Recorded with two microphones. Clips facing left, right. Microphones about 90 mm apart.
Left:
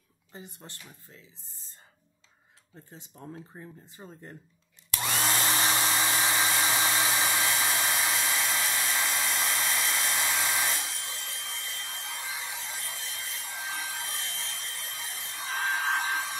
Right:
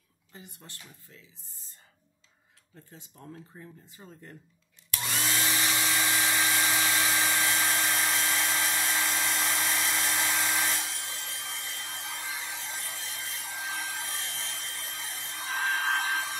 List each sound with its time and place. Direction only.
0.3 s speech: 30° left (ahead or behind)
2.7 s speech: 30° left (ahead or behind)
5.4 s hair dryer: 35° left (ahead or behind); by 16.3 s centre (ahead or behind)